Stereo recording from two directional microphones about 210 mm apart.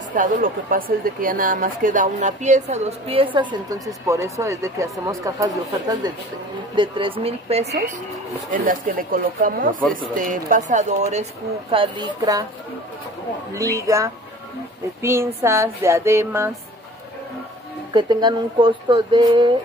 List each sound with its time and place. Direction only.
0.1 s a woman's voice: 40° right (ahead or behind); by 3.8 s 20° right (ahead or behind)
4.1 s a sound: 15° right (ahead or behind)
6.7 s speech: 25° right (ahead or behind)
8.5 s a woman's voice: 40° right (ahead or behind); by 12.4 s 20° right (ahead or behind)
13.6 s a sound: 15° right (ahead or behind)
17.9 s speech: 20° right (ahead or behind)